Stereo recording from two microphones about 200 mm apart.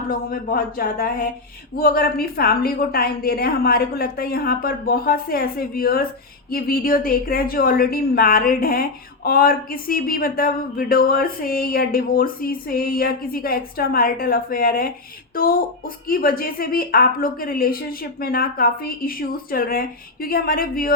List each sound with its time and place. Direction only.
0.1 s a woman's voice: 45° left (ahead or behind)
16.0 s a woman's voice: 45° left (ahead or behind)